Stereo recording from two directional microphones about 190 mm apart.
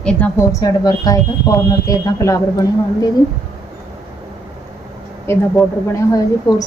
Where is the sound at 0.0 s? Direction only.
5° left (ahead or behind).